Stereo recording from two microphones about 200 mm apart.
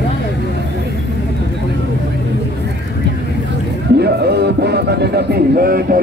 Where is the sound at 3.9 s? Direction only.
55° right (ahead or behind).